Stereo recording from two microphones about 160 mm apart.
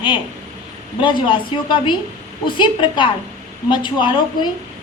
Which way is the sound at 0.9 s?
30° left (ahead or behind).